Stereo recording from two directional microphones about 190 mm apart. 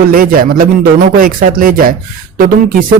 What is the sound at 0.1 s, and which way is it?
Speech, 50° right (ahead or behind).